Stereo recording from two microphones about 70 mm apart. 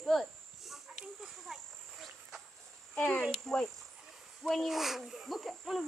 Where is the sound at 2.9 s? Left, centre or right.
Left.